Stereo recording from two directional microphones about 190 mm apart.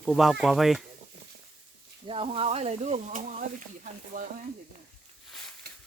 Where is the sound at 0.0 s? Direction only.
Centre (ahead or behind).